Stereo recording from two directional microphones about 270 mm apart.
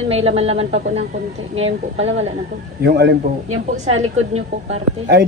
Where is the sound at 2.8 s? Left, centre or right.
Right.